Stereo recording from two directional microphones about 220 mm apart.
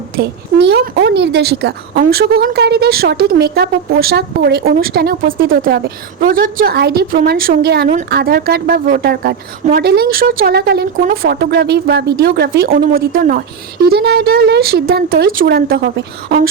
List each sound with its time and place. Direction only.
0.2 s a woman's voice: 50° right (ahead or behind)